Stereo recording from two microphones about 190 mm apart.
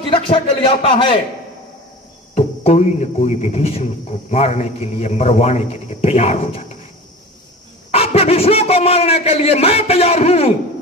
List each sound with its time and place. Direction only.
0.0 s a man's voice: 30° left (ahead or behind)
2.3 s a man's voice: 35° left (ahead or behind)
7.9 s a man's voice: 30° left (ahead or behind)